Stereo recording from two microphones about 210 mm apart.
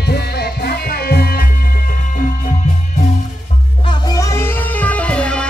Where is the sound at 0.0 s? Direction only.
50° left (ahead or behind).